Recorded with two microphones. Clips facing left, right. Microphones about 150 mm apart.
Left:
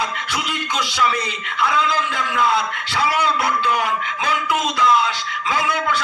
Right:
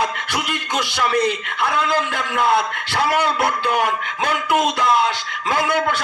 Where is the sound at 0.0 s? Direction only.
55° right (ahead or behind).